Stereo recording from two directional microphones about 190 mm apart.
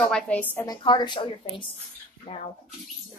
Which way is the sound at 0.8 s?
25° left (ahead or behind).